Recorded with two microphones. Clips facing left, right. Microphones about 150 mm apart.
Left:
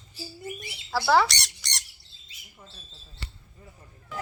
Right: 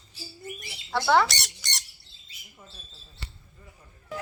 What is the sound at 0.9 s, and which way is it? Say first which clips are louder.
Squawk: even; 5° left (ahead or behind).